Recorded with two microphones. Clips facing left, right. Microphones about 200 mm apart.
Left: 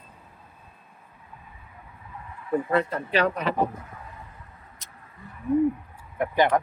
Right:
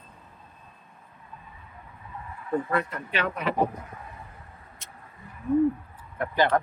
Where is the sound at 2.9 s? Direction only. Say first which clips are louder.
Left 6 dB; 35° left (ahead or behind).